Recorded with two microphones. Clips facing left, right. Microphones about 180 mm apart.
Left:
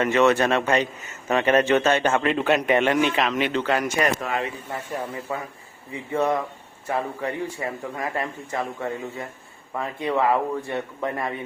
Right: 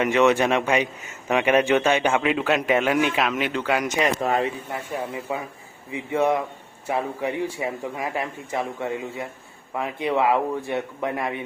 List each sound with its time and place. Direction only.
0.0 s a man's voice: 15° right (ahead or behind)
3.8 s speech: 20° right (ahead or behind)
4.2 s speech: 35° right (ahead or behind)
4.7 s a man's voice: 10° right (ahead or behind)